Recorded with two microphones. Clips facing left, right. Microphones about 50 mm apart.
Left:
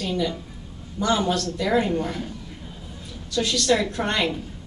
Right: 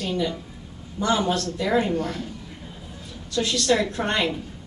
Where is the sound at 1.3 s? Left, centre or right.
Right.